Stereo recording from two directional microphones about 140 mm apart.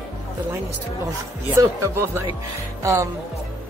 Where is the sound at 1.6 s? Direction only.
20° right (ahead or behind).